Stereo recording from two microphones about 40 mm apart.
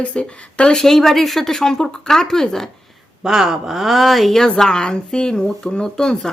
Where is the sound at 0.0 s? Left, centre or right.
Left; by 2.6 s centre.